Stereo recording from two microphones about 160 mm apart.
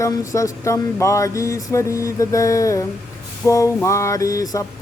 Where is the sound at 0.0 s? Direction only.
20° left (ahead or behind).